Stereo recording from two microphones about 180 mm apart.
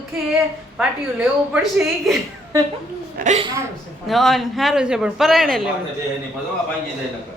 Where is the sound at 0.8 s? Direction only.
5° right (ahead or behind).